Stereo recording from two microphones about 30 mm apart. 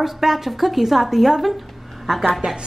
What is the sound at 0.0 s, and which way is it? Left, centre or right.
A woman's voice, centre.